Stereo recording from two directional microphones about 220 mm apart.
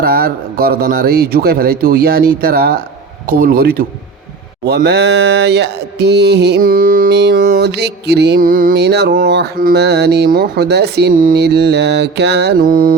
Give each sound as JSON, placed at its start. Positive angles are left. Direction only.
{"t": 0.0, "sound": "mantra", "side_deg": -45}